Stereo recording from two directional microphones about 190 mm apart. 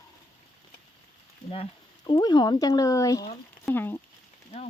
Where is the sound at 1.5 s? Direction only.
25° left (ahead or behind); by 3.9 s 10° left (ahead or behind).